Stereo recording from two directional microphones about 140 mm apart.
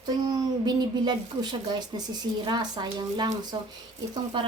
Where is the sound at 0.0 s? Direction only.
30° right (ahead or behind).